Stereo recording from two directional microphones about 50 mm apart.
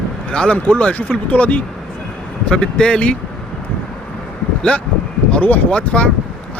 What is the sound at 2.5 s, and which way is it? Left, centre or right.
Speech, centre.